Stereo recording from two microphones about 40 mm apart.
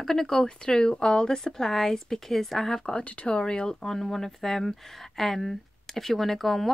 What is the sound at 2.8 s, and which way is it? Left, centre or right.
Speech, left.